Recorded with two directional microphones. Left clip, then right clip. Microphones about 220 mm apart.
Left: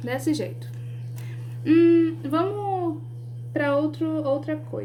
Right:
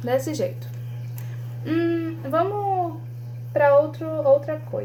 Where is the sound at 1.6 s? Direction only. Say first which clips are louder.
Left 6 dB; 40° left (ahead or behind).